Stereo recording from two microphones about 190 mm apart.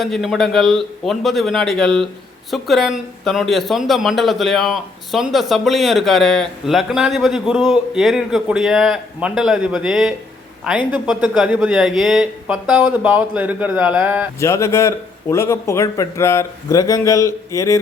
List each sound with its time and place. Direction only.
0.0 s speech: centre (ahead or behind)
14.3 s a man's voice: 15° left (ahead or behind)